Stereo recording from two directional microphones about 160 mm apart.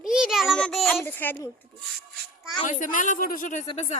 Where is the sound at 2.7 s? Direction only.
55° left (ahead or behind).